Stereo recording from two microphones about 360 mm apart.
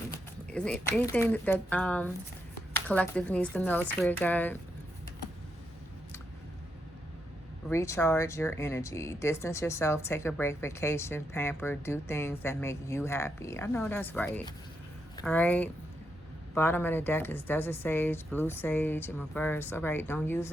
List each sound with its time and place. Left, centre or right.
0.1 s speech: centre
7.7 s speech: centre